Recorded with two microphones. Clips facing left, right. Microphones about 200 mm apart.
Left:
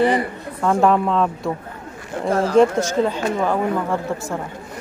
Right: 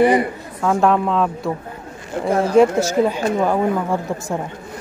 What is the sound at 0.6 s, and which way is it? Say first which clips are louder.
A woman's voice: even; centre (ahead or behind).